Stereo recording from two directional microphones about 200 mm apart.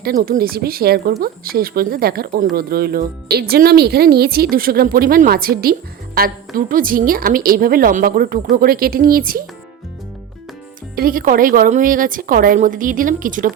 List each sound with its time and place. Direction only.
0.0 s a woman's voice: 50° right (ahead or behind)
10.9 s a woman's voice: 45° right (ahead or behind)